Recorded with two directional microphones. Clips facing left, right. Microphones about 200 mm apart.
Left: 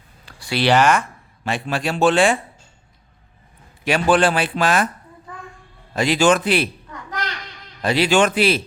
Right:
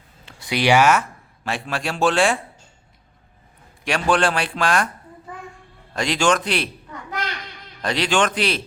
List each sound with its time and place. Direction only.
0.3 s speech: 20° right (ahead or behind); by 2.4 s centre (ahead or behind)
3.8 s speech: 5° left (ahead or behind)
5.9 s speech: 5° left (ahead or behind)
7.8 s a man's voice: 5° left (ahead or behind)